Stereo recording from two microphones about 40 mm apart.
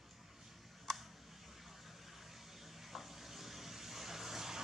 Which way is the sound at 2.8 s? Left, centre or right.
Centre.